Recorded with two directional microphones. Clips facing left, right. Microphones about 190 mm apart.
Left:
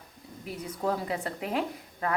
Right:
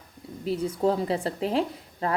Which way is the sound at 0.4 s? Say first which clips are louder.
Right 7 dB; 30° right (ahead or behind).